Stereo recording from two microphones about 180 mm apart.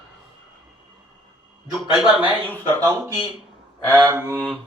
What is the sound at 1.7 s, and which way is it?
Speech, centre (ahead or behind).